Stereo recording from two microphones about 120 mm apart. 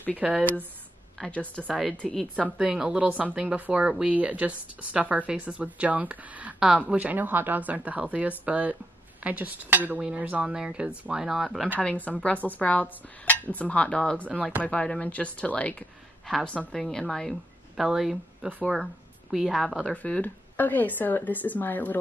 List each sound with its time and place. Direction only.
0.2 s speech: 5° right (ahead or behind)
1.1 s speech: 10° left (ahead or behind)
2.5 s speech: 5° right (ahead or behind)
11.8 s a woman's voice: 10° left (ahead or behind)